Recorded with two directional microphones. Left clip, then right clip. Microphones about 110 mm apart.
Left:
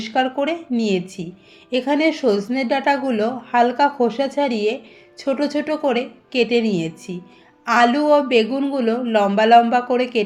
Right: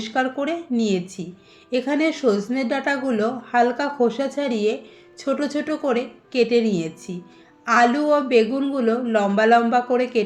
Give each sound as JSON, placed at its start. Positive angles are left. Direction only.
{"t": 0.0, "sound": "a woman's voice", "side_deg": 45}